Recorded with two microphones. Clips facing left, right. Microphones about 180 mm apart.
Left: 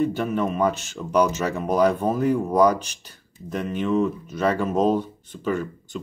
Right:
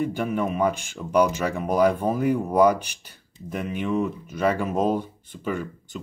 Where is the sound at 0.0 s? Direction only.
10° right (ahead or behind).